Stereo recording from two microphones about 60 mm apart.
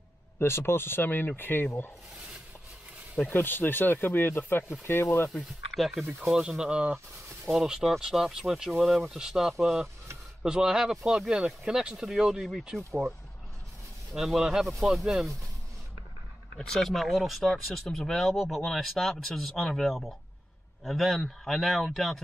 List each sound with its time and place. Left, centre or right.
0.4 s speech: left
3.3 s speech: left
5.3 s speech: centre; by 7.0 s right
7.4 s speech: centre
14.1 s speech: centre
16.5 s speech: centre